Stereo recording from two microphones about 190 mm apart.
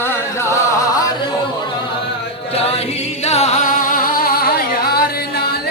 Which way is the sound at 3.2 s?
35° left (ahead or behind).